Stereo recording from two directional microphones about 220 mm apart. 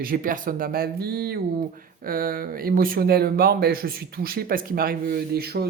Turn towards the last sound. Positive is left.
turn(degrees=-45)  # may be behind; listen again after turning